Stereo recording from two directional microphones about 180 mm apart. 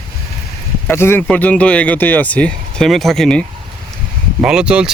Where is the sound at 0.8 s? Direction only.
15° left (ahead or behind).